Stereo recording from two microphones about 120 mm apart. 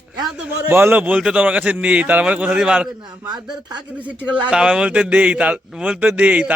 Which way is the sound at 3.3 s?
35° right (ahead or behind).